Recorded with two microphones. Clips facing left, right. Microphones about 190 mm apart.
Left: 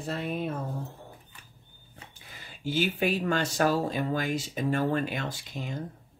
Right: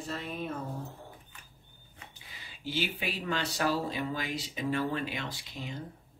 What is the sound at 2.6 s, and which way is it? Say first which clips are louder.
Speech: left 7 dB; 50° left (ahead or behind).